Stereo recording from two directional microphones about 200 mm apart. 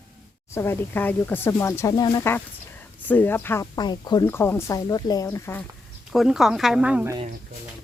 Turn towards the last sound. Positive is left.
turn(degrees=-10)  # may be behind; listen again after turning